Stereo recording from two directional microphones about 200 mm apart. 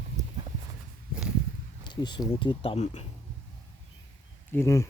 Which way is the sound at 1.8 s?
20° left (ahead or behind).